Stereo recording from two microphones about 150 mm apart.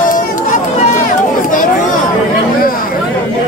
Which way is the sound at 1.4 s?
60° left (ahead or behind).